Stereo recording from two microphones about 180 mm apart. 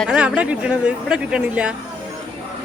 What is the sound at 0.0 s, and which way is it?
Speech, 5° right (ahead or behind).